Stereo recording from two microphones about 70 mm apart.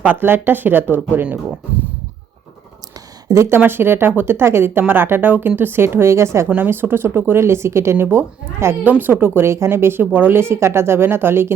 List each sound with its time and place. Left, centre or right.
0.0 s speech: right
3.2 s speech: right
3.7 s speech: right
6.6 s speech: right
7.9 s speech: right